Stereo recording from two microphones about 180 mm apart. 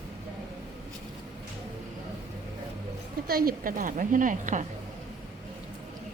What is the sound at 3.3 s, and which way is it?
Speech, 55° right (ahead or behind).